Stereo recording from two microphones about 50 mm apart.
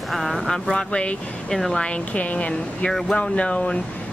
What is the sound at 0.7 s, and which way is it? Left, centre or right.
Speech, centre.